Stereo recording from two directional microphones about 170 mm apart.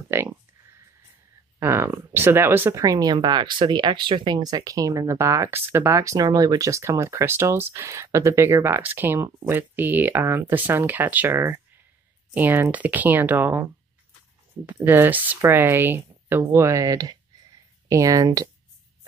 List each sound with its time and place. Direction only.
0.1 s speech: 15° right (ahead or behind)
1.6 s speech: 15° right (ahead or behind)
14.9 s speech: 10° right (ahead or behind)